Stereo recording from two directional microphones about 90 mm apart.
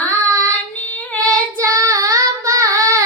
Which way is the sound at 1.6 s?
35° right (ahead or behind).